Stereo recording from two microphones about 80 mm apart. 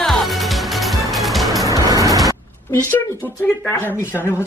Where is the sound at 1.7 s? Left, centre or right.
Right.